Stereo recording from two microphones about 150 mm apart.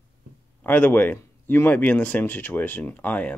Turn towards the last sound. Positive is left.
turn(degrees=10)  # may be behind; listen again after turning